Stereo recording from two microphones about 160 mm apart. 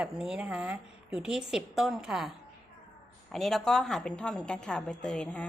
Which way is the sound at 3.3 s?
Centre (ahead or behind).